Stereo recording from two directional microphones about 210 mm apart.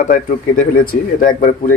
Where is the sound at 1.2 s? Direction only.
40° left (ahead or behind).